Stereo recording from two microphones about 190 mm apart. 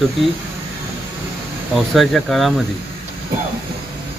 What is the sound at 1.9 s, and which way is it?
Speech, centre (ahead or behind).